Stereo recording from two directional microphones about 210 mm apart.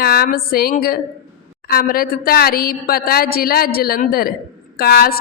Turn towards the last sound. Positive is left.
turn(degrees=45)  # may be behind; listen again after turning